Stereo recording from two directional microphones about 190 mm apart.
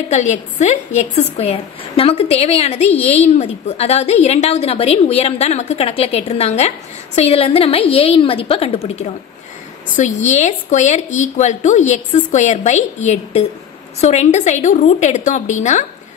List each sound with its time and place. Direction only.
0.1 s a woman's voice: 35° left (ahead or behind)